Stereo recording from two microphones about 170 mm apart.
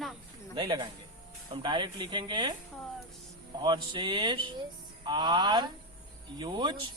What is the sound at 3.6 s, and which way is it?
Speech, 25° right (ahead or behind).